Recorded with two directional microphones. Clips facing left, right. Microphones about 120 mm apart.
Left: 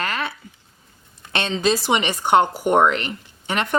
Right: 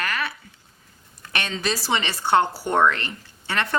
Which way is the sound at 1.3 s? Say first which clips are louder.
Left 6 dB; 20° left (ahead or behind).